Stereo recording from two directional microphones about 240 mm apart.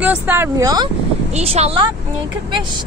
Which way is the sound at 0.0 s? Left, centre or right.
Centre.